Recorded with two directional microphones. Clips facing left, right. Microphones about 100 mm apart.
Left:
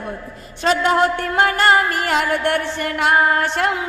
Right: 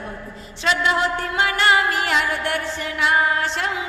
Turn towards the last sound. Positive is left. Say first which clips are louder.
# left 4 dB
turn(degrees=55)  # may be behind; listen again after turning